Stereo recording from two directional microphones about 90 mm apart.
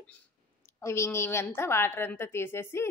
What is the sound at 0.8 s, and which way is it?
A woman's voice, 30° left (ahead or behind).